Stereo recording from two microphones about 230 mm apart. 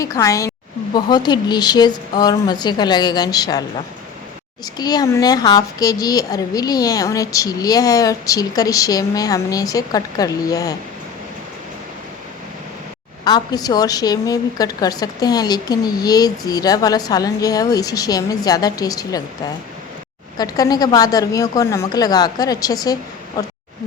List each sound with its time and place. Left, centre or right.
0.0 s speech: centre
4.6 s speech: centre
13.2 s speech: centre
20.4 s speech: centre